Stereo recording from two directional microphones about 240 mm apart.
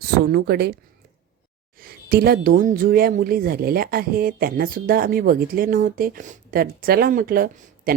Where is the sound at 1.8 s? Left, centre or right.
Right.